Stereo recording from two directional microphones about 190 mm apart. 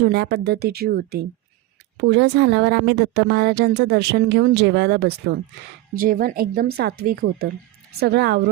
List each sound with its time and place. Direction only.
0.0 s speech: 60° right (ahead or behind)
2.0 s speech: 65° right (ahead or behind)